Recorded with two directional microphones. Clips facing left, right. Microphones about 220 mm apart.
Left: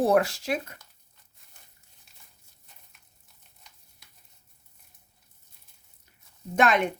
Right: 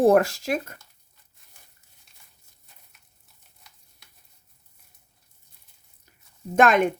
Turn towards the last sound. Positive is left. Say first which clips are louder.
# right 4 dB
turn(degrees=-45)  # may be behind; listen again after turning